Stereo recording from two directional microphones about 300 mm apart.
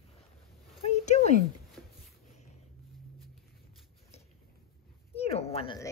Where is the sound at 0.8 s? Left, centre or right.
Left.